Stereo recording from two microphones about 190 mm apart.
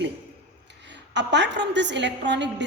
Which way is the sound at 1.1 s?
65° right (ahead or behind).